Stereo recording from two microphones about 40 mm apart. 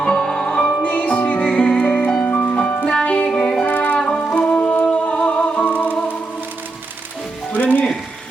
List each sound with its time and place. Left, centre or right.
0.0 s music: centre
0.8 s music: left
1.9 s music: left
2.8 s music: left
3.1 s music: left
3.9 s music: left
7.5 s music: left